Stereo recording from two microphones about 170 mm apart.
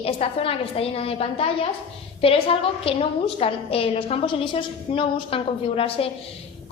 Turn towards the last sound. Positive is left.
turn(degrees=35)  # may be behind; listen again after turning